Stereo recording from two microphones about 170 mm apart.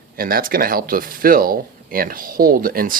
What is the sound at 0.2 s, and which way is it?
Speech, 60° right (ahead or behind).